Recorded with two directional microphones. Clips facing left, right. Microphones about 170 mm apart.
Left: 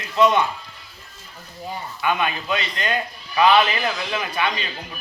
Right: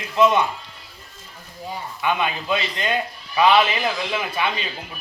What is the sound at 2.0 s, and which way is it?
A man's voice, 20° right (ahead or behind).